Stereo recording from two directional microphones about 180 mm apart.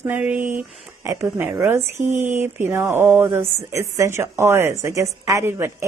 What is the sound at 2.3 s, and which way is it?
A woman's voice, 15° right (ahead or behind).